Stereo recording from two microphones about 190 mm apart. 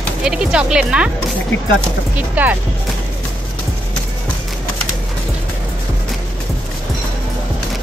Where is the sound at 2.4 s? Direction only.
10° right (ahead or behind).